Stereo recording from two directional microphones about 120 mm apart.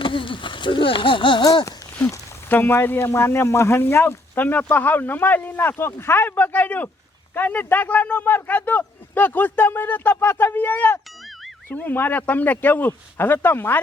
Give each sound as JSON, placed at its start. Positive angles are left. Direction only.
{"t": 0.0, "sound": "speech", "side_deg": 45}
{"t": 1.6, "sound": "speech", "side_deg": 20}